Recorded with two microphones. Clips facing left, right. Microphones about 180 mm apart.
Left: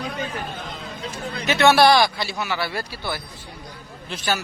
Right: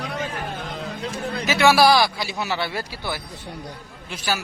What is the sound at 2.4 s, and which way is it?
Speech, 25° right (ahead or behind).